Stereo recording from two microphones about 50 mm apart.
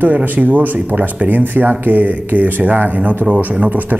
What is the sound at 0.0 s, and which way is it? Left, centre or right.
Speech, right.